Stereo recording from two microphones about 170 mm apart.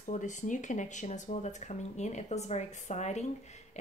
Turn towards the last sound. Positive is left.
turn(degrees=40)  # may be behind; listen again after turning